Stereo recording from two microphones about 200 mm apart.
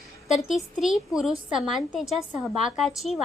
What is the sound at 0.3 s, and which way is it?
A woman's voice, centre (ahead or behind).